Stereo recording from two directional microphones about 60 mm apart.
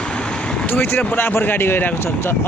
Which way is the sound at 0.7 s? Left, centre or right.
Left.